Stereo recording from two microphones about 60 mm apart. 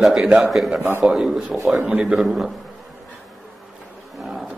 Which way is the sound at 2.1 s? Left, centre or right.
Centre.